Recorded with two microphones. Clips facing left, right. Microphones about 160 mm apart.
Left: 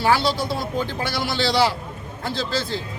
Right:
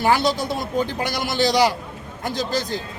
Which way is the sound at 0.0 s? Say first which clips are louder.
Right 1 dB; 20° right (ahead or behind).